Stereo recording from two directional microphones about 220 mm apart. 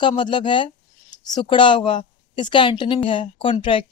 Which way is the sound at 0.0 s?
20° left (ahead or behind).